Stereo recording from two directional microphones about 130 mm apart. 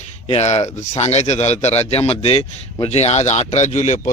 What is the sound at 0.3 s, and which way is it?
A man's voice, 60° left (ahead or behind).